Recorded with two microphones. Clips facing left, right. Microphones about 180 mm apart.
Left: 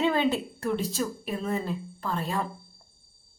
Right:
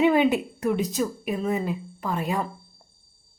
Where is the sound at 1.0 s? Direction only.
5° right (ahead or behind).